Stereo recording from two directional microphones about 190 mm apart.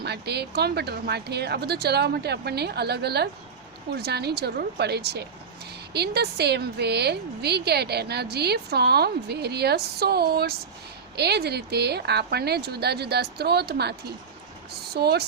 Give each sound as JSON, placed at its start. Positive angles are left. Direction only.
{"t": 0.0, "sound": "a woman's voice", "side_deg": -60}